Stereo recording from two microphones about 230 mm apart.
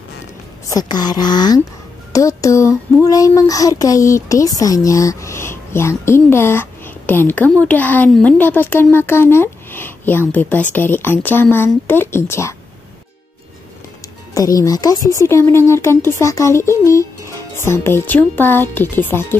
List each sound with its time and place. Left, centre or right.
0.7 s a child's voice: centre
14.3 s a child's voice: centre